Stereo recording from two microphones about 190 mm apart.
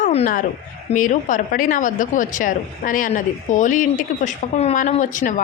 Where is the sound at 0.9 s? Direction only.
45° left (ahead or behind).